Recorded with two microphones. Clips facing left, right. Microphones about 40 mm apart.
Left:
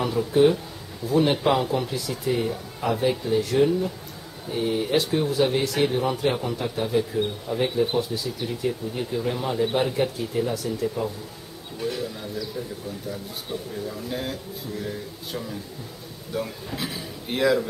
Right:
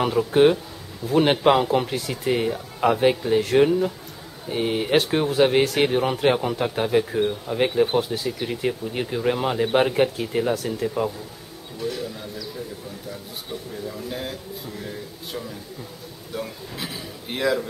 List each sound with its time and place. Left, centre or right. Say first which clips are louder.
0.3 s speech: right 1 dB; right
11.8 s speech: even; centre